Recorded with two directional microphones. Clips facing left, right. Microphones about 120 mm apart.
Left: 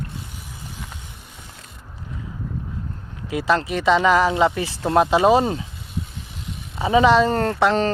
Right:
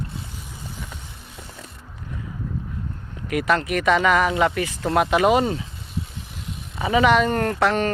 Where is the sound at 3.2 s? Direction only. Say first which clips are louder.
Left 1 dB; 25° left (ahead or behind).